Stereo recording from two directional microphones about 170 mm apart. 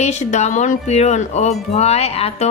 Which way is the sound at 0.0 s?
40° left (ahead or behind).